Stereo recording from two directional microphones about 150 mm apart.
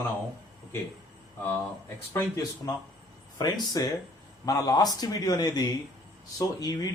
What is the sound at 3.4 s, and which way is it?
Speech, 30° left (ahead or behind).